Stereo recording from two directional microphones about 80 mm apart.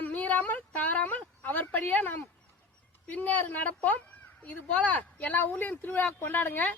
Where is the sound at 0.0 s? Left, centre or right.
Left.